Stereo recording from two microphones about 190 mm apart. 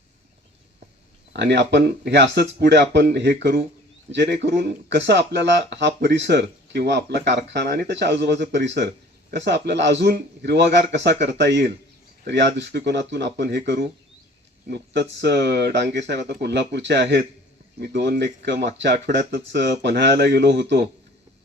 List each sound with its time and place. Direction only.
1.3 s speech: 65° right (ahead or behind)